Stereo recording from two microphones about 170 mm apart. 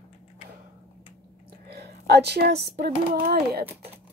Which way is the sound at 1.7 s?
70° right (ahead or behind).